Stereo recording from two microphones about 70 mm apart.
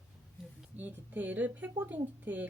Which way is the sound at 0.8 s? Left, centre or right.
Right.